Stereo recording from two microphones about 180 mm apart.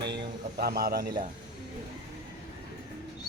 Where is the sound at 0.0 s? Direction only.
65° right (ahead or behind).